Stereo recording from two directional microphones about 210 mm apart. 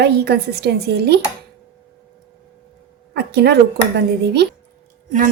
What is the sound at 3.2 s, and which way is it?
A woman's voice, 50° right (ahead or behind).